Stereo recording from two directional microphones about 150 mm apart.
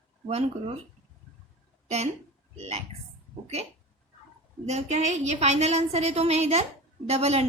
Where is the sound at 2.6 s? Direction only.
45° right (ahead or behind).